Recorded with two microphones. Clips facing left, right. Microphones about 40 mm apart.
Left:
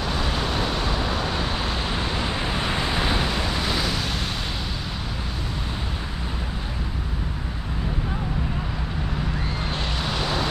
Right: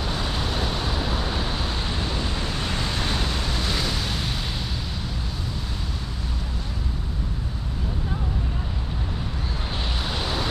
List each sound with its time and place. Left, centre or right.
2.1 s waves: left; by 4.0 s centre
9.8 s vehicle: centre